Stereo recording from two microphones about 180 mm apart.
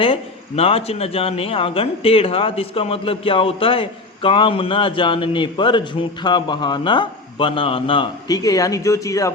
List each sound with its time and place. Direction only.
0.0 s a man's voice: 30° left (ahead or behind)